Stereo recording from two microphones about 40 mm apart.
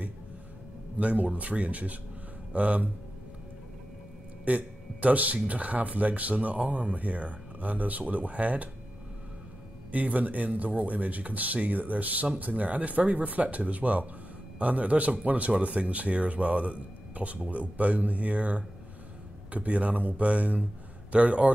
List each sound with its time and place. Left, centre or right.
0.9 s speech: right
4.5 s speech: right
9.8 s speech: right